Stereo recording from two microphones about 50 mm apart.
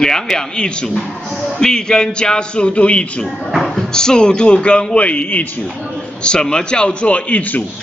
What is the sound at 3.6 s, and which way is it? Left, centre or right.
A man's voice, centre.